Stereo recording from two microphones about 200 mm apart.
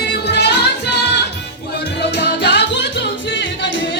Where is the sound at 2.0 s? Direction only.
55° left (ahead or behind).